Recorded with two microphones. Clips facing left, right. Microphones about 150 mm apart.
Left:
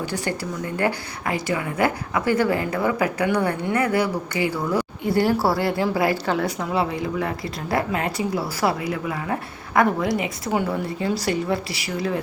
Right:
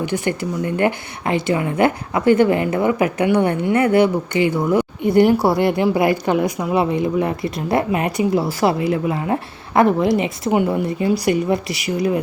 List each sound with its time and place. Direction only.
0.3 s speech: 20° right (ahead or behind)